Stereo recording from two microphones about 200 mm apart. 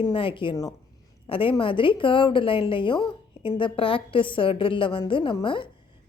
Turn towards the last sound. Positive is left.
turn(degrees=25)  # may be behind; listen again after turning